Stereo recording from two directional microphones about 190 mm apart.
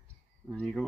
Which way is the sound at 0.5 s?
Centre (ahead or behind).